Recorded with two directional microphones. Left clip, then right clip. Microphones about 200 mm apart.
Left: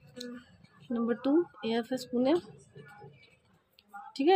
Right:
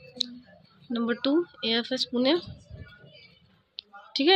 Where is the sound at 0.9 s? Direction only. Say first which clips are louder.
Right 3 dB; 5° left (ahead or behind).